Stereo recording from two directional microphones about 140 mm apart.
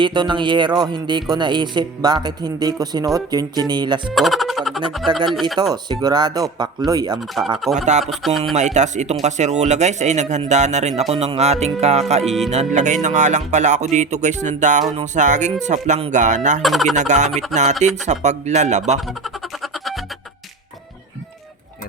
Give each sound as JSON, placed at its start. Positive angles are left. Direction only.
{"t": 0.0, "sound": "speech", "side_deg": -35}
{"t": 4.1, "sound": "music", "side_deg": 0}
{"t": 5.1, "sound": "speech", "side_deg": -35}
{"t": 7.6, "sound": "speech", "side_deg": 0}
{"t": 8.5, "sound": "speech", "side_deg": -55}
{"t": 12.2, "sound": "speech", "side_deg": 0}
{"t": 12.5, "sound": "speech", "side_deg": -55}
{"t": 16.6, "sound": "speech", "side_deg": 0}
{"t": 16.9, "sound": "speech", "side_deg": -60}
{"t": 18.9, "sound": "music", "side_deg": 0}